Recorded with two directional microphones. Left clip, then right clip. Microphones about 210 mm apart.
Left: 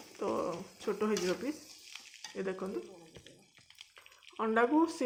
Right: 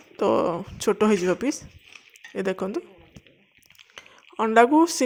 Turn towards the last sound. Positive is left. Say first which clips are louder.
# right 12 dB
turn(degrees=-45)  # may be behind; listen again after turning